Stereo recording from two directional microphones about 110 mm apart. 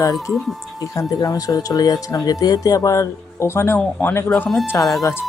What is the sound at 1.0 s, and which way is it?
Speech, 35° left (ahead or behind).